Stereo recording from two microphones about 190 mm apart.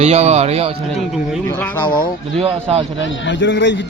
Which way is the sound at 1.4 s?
10° left (ahead or behind).